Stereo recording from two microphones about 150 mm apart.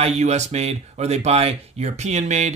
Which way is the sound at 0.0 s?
50° right (ahead or behind).